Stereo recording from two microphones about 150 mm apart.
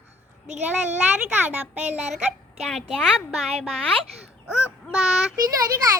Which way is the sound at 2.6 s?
Centre (ahead or behind).